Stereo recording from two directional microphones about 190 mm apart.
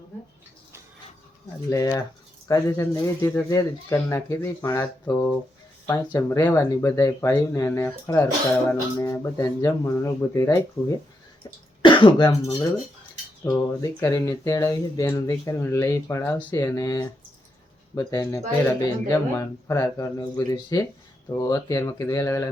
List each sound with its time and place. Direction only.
1.7 s speech: 15° left (ahead or behind)
11.8 s speech: 25° left (ahead or behind)